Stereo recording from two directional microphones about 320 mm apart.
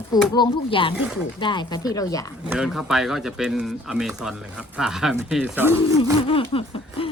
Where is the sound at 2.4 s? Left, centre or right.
Centre.